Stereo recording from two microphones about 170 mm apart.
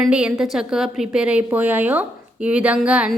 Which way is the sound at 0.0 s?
5° right (ahead or behind).